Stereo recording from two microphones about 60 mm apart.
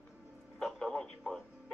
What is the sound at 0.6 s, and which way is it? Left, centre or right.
Radio, centre.